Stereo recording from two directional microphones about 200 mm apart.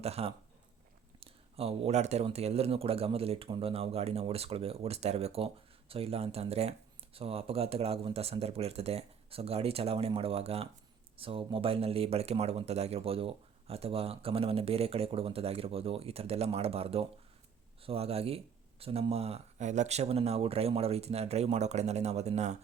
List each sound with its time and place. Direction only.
0.0 s speech: 30° right (ahead or behind)